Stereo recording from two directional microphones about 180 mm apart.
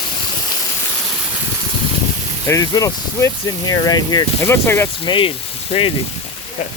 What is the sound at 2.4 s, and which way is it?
Speech, 20° left (ahead or behind).